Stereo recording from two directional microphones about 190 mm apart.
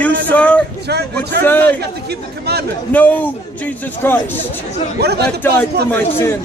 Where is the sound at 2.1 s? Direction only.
55° right (ahead or behind).